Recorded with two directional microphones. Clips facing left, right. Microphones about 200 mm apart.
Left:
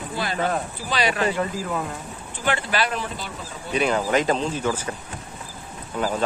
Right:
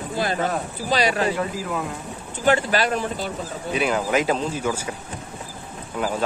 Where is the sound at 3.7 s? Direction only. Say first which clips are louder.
Left 1 dB; 5° right (ahead or behind).